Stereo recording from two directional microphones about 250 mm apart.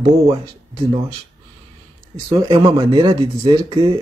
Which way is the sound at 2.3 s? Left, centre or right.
Centre.